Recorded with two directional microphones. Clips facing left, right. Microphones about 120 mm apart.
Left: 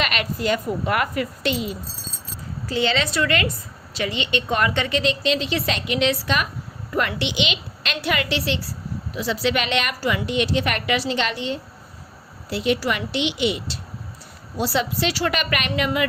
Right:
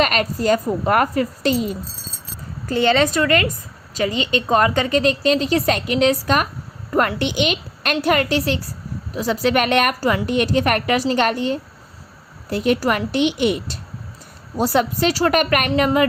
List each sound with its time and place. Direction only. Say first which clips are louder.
0.0 s a woman's voice: right 5 dB; 40° right (ahead or behind)
2.6 s a woman's voice: right 6 dB; 50° right (ahead or behind)